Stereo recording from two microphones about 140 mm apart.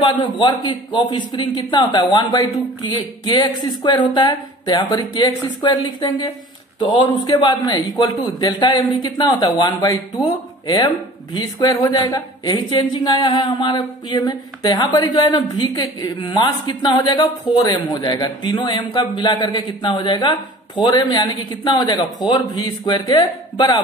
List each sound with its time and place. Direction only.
0.0 s speech: 35° left (ahead or behind)
11.3 s speech: 30° left (ahead or behind)